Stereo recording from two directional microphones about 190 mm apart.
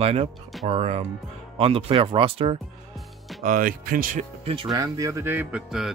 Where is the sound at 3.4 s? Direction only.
45° right (ahead or behind).